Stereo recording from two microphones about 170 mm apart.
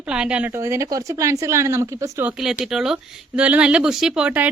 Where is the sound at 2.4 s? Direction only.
Centre (ahead or behind).